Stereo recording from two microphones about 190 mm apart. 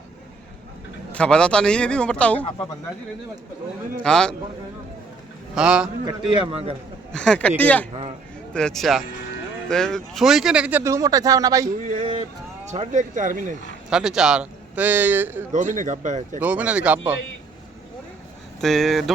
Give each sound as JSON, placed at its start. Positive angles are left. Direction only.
{"t": 1.1, "sound": "a man's voice", "side_deg": 5}
{"t": 4.0, "sound": "a man's voice", "side_deg": 5}
{"t": 5.5, "sound": "a man's voice", "side_deg": -5}
{"t": 6.5, "sound": "a man's voice", "side_deg": -30}
{"t": 7.1, "sound": "a man's voice", "side_deg": 5}
{"t": 11.8, "sound": "speech", "side_deg": -40}
{"t": 13.9, "sound": "speech", "side_deg": -5}
{"t": 15.5, "sound": "speech", "side_deg": -40}
{"t": 16.4, "sound": "speech", "side_deg": -5}
{"t": 18.6, "sound": "a man's voice", "side_deg": 0}